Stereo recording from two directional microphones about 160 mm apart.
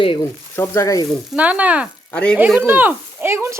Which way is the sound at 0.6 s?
20° left (ahead or behind).